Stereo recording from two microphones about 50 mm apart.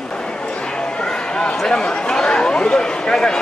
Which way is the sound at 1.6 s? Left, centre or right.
Centre.